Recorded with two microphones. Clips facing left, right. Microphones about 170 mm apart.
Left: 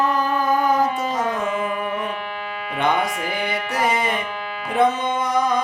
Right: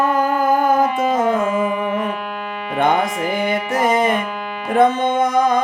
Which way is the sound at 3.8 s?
50° right (ahead or behind).